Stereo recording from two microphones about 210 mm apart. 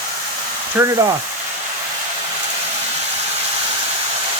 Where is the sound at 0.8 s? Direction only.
15° right (ahead or behind).